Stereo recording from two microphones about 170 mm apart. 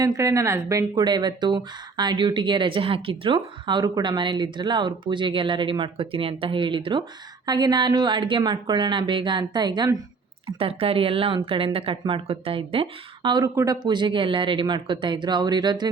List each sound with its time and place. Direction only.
0.0 s speech: 20° right (ahead or behind)